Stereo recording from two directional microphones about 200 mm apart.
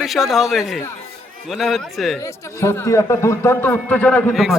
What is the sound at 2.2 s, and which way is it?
A man's voice, 15° left (ahead or behind).